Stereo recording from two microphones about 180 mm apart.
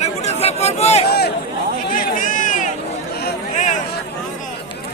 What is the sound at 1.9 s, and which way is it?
Run, 45° left (ahead or behind).